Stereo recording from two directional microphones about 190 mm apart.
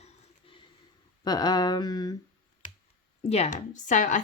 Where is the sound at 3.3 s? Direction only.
35° left (ahead or behind).